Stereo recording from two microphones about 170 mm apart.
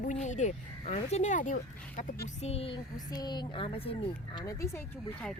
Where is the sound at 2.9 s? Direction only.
25° left (ahead or behind).